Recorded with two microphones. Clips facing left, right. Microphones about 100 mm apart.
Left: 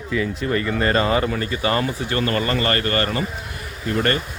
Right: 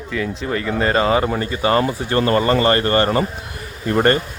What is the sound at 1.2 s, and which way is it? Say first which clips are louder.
Speech: right 3 dB; 20° right (ahead or behind).